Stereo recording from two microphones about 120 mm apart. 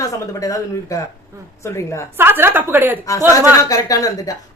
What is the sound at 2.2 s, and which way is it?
A woman's voice, 20° right (ahead or behind).